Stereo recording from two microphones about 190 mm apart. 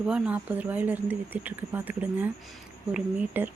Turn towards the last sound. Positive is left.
turn(degrees=-10)  # may be behind; listen again after turning